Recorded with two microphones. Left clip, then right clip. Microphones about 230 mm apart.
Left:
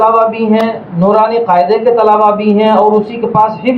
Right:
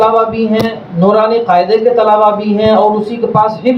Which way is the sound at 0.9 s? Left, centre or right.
Right.